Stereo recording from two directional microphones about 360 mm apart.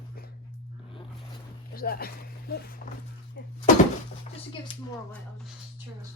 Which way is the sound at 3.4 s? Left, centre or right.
Left.